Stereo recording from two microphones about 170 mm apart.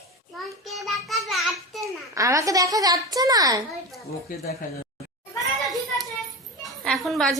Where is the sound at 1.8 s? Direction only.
20° right (ahead or behind).